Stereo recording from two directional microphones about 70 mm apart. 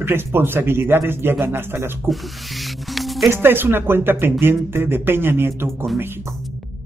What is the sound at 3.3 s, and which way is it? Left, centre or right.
Speech, right.